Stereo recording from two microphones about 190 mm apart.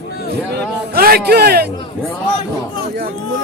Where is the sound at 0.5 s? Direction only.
50° right (ahead or behind).